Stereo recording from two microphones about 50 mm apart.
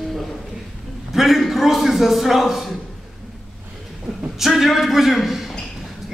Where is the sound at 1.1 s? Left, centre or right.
Centre.